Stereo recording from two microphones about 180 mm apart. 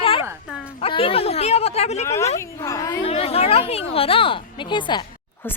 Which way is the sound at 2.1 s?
15° left (ahead or behind).